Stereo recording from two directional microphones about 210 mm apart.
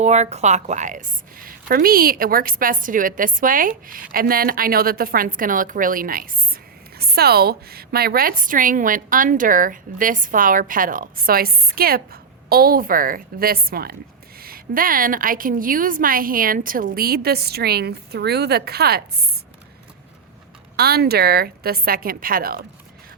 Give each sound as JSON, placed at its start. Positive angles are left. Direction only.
{"t": 0.0, "sound": "a woman's voice", "side_deg": -35}
{"t": 20.7, "sound": "a woman's voice", "side_deg": -50}